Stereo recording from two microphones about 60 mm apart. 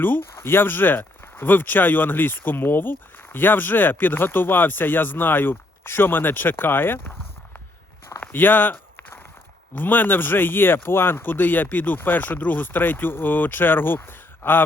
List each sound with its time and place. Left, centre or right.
0.3 s speech: left
8.3 s a sound: left
9.7 s speech: left